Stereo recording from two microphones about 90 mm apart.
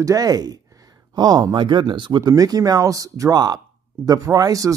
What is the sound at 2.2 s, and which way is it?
Speech, 45° right (ahead or behind).